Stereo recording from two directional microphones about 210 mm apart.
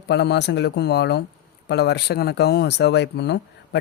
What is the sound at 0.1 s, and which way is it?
Speech, 55° left (ahead or behind).